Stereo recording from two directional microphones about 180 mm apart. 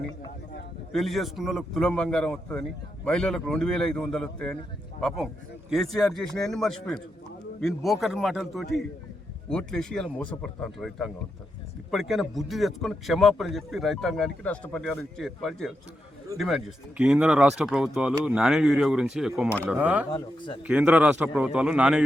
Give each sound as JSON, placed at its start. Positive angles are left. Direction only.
{"t": 0.9, "sound": "a man's voice", "side_deg": 0}
{"t": 20.1, "sound": "speech", "side_deg": 25}
{"t": 20.7, "sound": "a man's voice", "side_deg": -5}